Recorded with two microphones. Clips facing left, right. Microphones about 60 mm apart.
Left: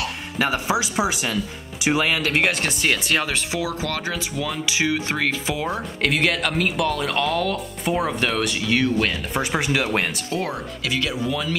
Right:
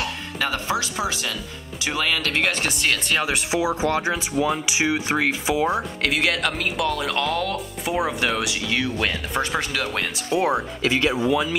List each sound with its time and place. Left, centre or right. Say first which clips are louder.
0.4 s speech: left 3 dB; centre
2.6 s speech: left 1 dB; centre
3.3 s speech: right 3 dB; right; by 9.4 s centre
9.4 s speech: left 1 dB; centre
10.3 s speech: right 7 dB; centre
10.8 s speech: right 2 dB; right